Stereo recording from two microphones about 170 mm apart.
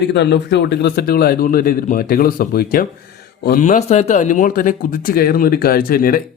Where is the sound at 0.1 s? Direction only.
90° left.